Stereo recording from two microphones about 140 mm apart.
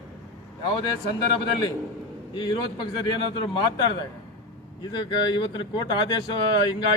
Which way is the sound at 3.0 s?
30° left (ahead or behind).